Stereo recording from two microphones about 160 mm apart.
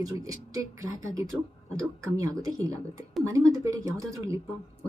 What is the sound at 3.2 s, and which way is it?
Speech, 20° right (ahead or behind).